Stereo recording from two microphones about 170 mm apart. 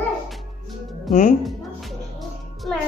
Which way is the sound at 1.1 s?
50° left (ahead or behind).